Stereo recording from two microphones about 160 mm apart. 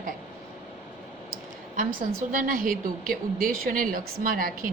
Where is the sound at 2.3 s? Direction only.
60° right (ahead or behind).